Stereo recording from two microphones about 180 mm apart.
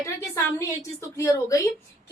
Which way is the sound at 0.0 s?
15° left (ahead or behind).